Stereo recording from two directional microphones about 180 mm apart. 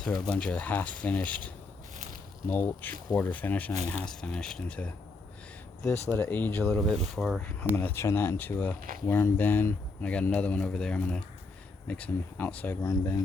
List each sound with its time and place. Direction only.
0.0 s speech: 5° left (ahead or behind)
2.5 s speech: 10° left (ahead or behind)
12.8 s speech: 20° left (ahead or behind)